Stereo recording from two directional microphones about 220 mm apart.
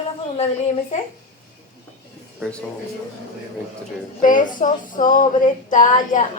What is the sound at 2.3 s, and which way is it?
Speech, centre (ahead or behind).